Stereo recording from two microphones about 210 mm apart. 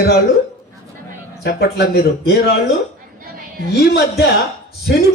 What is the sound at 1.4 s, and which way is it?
Speech, 50° left (ahead or behind).